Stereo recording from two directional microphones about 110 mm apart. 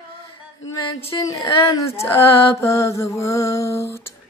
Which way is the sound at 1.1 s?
30° left (ahead or behind).